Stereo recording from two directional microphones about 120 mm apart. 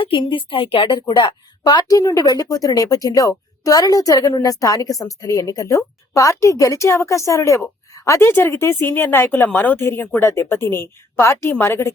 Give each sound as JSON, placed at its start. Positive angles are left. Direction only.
{"t": 0.0, "sound": "a woman's voice", "side_deg": 45}